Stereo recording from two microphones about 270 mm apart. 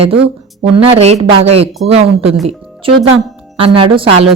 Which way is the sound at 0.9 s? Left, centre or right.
Right.